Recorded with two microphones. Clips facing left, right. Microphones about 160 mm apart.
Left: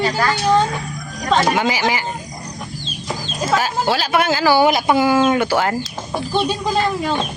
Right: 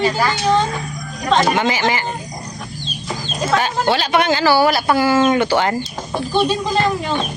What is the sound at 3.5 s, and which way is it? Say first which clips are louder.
Speech: right 1 dB; 5° left (ahead or behind).